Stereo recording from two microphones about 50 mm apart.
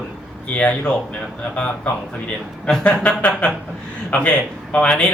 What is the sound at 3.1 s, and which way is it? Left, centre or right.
Speech, left.